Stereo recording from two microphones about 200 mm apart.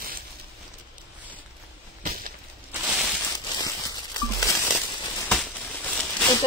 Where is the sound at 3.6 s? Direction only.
20° left (ahead or behind).